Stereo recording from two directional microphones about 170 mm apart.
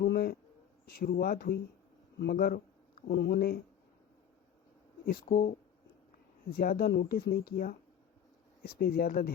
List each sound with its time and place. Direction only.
0.0 s speech: 60° left (ahead or behind)
5.0 s speech: 60° left (ahead or behind)